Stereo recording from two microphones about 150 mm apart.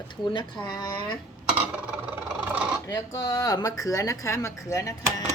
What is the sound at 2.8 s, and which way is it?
A woman's voice, 25° left (ahead or behind).